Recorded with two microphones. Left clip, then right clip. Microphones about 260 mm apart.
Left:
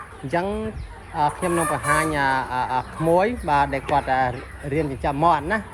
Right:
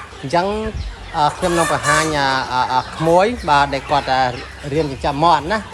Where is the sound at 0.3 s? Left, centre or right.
Centre.